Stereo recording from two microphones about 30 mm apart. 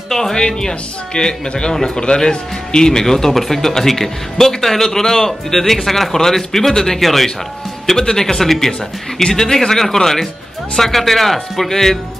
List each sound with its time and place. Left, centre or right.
0.1 s speech: centre
0.4 s speech: left
7.0 s speech: centre
7.8 s speech: centre